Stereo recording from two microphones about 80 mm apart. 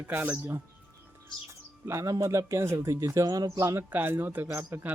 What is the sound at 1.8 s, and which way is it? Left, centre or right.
Speech, right.